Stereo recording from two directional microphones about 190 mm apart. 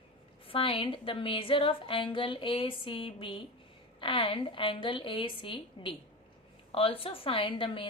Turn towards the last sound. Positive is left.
turn(degrees=25)  # may be behind; listen again after turning